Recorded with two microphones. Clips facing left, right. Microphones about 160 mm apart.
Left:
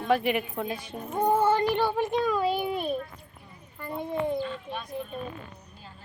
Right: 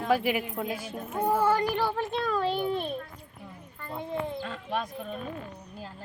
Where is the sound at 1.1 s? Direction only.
30° left (ahead or behind); by 2.9 s 10° left (ahead or behind).